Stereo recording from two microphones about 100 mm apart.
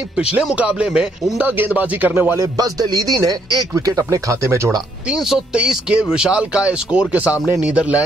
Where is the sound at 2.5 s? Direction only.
40° right (ahead or behind).